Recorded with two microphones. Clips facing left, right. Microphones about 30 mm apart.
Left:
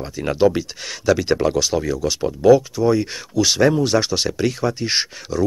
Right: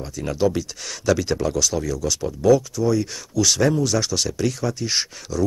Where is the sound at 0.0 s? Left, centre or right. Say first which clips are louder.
Left 5 dB; left.